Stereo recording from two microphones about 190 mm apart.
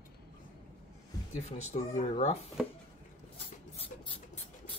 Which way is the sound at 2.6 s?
Centre (ahead or behind).